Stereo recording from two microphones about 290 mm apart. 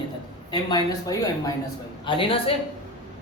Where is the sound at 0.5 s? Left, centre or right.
Centre.